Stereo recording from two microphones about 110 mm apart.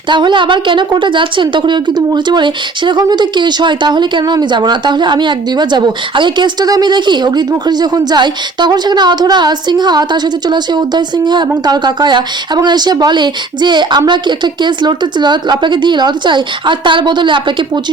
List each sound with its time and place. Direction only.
0.1 s a woman's voice: 45° right (ahead or behind)